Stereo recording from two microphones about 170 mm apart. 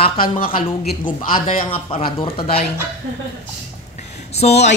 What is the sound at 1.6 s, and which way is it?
Speech, 35° left (ahead or behind).